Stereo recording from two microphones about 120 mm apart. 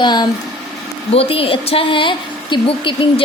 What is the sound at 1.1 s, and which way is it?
A woman's voice, 55° left (ahead or behind).